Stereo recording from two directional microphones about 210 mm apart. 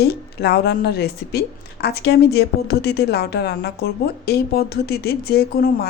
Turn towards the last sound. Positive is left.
turn(degrees=45)  # may be behind; listen again after turning